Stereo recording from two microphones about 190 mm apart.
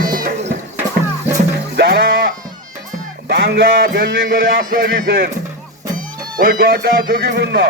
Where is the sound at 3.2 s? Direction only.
60° right (ahead or behind).